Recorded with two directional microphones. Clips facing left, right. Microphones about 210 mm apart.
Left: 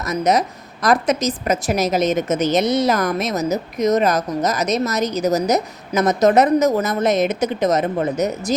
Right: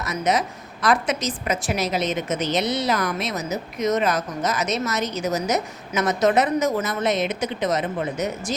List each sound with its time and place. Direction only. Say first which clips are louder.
0.0 s a woman's voice: left 5 dB; 40° left (ahead or behind)